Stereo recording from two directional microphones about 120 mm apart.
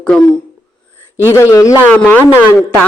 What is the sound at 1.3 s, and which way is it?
Speech, 25° left (ahead or behind).